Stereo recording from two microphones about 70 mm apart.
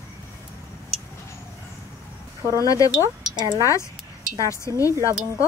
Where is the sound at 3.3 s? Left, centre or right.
Right.